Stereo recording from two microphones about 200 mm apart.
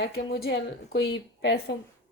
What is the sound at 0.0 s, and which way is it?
A woman's voice, 55° left (ahead or behind).